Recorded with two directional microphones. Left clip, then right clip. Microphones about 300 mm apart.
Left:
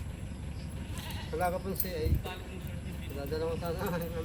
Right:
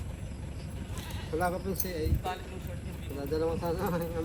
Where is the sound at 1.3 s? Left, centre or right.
Left.